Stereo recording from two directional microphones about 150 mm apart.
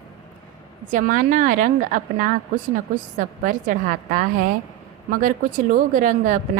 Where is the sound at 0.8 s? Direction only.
60° right (ahead or behind).